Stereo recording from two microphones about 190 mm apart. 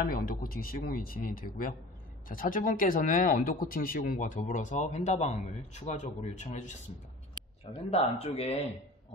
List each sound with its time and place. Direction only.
0.0 s speech: 50° left (ahead or behind)
7.9 s speech: 30° left (ahead or behind)